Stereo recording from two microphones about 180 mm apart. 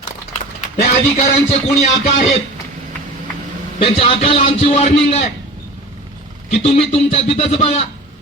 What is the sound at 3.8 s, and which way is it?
Speech, 30° left (ahead or behind).